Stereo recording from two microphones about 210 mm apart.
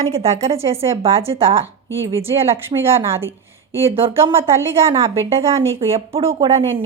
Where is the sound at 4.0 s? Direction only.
25° right (ahead or behind).